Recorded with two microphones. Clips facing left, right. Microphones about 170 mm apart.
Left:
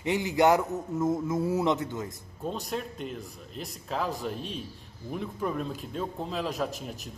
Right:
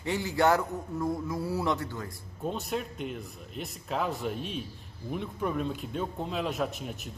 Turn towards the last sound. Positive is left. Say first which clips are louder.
# even
turn(degrees=0)  # may be behind; listen again after turning